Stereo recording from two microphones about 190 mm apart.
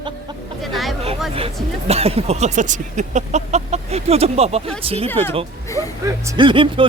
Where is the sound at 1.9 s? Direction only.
30° right (ahead or behind).